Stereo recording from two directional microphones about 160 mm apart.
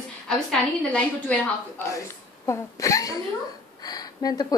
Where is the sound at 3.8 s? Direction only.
25° left (ahead or behind).